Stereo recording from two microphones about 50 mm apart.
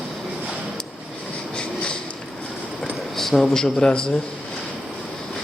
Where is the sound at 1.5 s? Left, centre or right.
Centre.